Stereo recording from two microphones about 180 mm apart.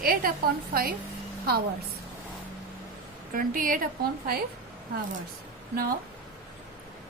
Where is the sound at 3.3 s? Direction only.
50° right (ahead or behind).